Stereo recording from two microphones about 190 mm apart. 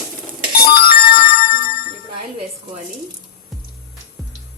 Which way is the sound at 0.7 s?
50° left (ahead or behind).